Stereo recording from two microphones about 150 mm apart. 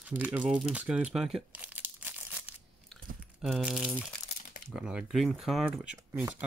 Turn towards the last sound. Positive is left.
turn(degrees=-15)  # may be behind; listen again after turning